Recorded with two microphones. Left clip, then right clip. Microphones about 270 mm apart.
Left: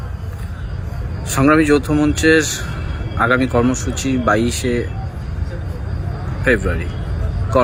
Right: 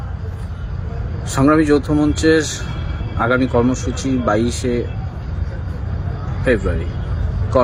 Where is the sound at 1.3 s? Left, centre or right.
Centre.